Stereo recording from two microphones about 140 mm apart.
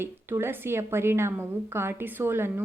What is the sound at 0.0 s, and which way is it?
A woman's voice, 15° right (ahead or behind).